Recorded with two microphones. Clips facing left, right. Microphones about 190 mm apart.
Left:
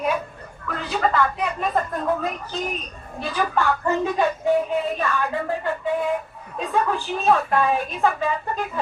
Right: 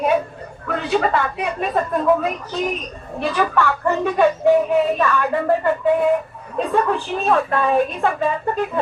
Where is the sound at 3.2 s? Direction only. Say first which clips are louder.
Right 4 dB; 70° right (ahead or behind).